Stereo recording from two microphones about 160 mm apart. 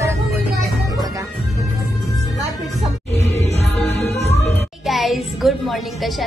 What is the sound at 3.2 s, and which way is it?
Music, 45° left (ahead or behind).